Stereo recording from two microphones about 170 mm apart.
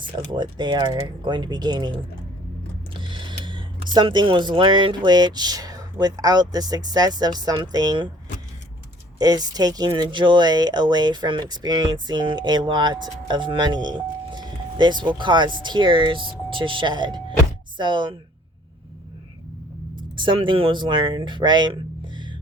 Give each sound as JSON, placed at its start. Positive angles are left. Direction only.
{"t": 0.3, "sound": "speech", "side_deg": -25}
{"t": 3.0, "sound": "speech", "side_deg": -25}
{"t": 9.1, "sound": "speech", "side_deg": -25}
{"t": 20.0, "sound": "speech", "side_deg": -30}